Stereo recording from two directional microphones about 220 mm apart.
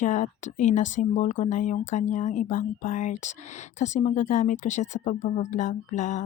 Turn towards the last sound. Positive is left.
turn(degrees=35)  # may be behind; listen again after turning